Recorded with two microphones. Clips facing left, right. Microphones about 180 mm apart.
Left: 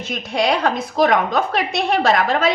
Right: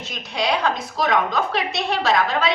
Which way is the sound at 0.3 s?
50° left (ahead or behind).